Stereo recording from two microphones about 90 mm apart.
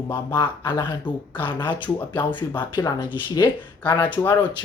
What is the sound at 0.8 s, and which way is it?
Speech, 65° left (ahead or behind).